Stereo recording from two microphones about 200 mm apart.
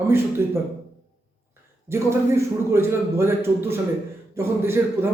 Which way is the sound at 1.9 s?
15° right (ahead or behind).